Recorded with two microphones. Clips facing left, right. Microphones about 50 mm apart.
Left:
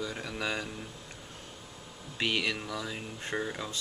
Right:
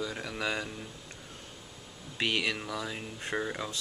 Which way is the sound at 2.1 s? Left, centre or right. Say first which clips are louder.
Even; centre.